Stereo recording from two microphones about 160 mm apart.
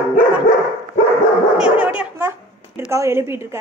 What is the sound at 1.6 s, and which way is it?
A woman's voice, 10° right (ahead or behind).